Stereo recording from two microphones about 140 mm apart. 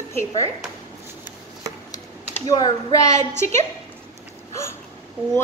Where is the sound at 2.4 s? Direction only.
30° left (ahead or behind).